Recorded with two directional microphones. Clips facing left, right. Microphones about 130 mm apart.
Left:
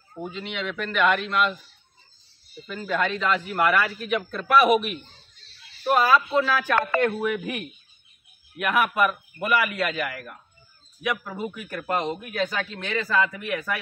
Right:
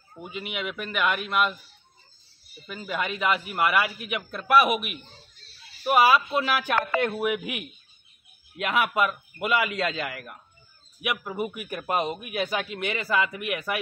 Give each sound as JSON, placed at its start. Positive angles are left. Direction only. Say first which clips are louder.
{"t": 0.3, "sound": "speech", "louder": "right 1 dB", "side_deg": -10}
{"t": 2.6, "sound": "a man's voice", "louder": "left 4 dB", "side_deg": -10}